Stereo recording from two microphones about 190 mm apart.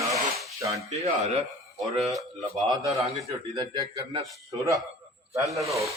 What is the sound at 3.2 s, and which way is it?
Speech, 20° right (ahead or behind).